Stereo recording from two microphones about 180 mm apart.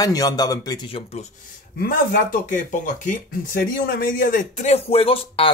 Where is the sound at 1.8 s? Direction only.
50° left (ahead or behind); by 5.5 s 30° left (ahead or behind).